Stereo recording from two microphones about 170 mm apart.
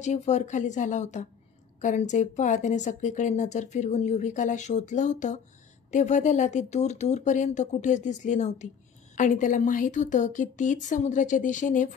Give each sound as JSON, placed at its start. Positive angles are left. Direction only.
{"t": 0.0, "sound": "speech", "side_deg": 45}